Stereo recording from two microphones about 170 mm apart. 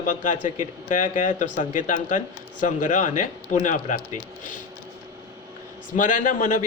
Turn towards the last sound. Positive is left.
turn(degrees=50)  # may be behind; listen again after turning